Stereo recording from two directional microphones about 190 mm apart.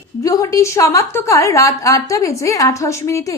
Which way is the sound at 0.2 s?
15° left (ahead or behind).